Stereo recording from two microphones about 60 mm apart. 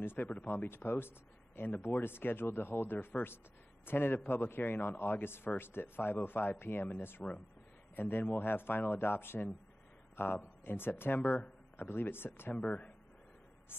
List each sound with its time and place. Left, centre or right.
0.0 s a man's voice: left
12.5 s speech: left